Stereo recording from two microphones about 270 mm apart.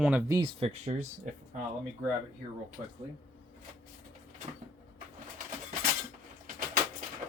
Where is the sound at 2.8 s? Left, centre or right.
Centre.